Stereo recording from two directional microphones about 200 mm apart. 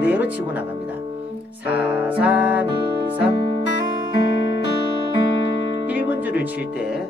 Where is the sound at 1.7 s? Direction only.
5° right (ahead or behind).